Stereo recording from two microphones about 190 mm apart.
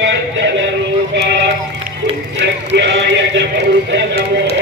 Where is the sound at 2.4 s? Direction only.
70° right (ahead or behind).